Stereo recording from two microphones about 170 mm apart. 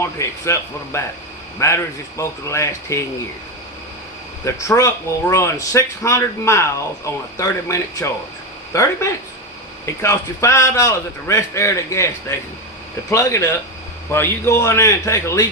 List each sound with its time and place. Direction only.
0.0 s speech: 15° left (ahead or behind)
4.4 s speech: 20° left (ahead or behind)